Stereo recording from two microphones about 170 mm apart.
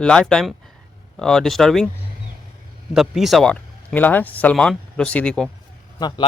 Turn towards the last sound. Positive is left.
turn(degrees=25)  # may be behind; listen again after turning